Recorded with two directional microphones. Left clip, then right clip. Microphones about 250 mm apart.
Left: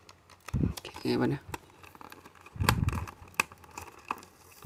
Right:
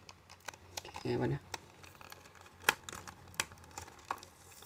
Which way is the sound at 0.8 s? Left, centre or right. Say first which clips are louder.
Left 5 dB; left.